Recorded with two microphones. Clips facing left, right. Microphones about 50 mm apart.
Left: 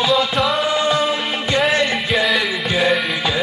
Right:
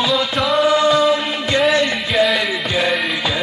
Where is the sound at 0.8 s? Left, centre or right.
Left.